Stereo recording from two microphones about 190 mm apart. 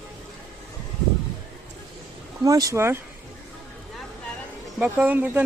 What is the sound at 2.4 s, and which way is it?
Speech, 20° right (ahead or behind).